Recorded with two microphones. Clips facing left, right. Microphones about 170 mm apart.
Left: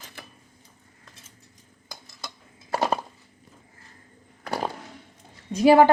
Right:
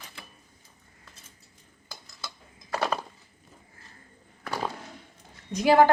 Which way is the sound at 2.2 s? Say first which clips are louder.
Left 2 dB; 25° left (ahead or behind).